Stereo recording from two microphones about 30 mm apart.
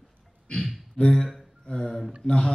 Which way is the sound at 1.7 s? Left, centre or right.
Left.